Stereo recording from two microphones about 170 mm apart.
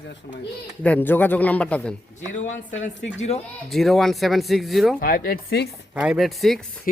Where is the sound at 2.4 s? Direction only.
45° left (ahead or behind).